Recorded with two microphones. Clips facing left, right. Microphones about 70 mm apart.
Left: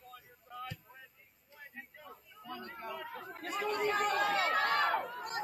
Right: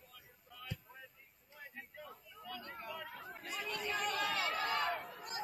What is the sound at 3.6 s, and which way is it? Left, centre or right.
Chatter, left.